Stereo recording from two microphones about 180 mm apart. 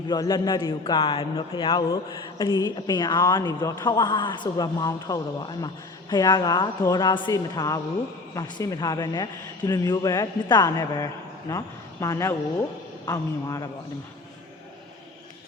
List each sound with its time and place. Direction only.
0.1 s a man's voice: 25° left (ahead or behind)